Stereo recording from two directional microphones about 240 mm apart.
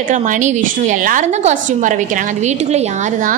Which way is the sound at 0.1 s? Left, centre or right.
Right.